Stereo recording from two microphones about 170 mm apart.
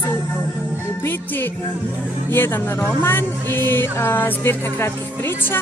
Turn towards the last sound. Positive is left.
turn(degrees=15)  # may be behind; listen again after turning